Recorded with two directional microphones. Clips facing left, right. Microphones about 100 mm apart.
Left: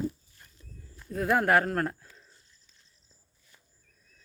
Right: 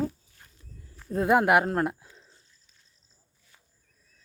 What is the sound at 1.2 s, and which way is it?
Speech, 20° right (ahead or behind).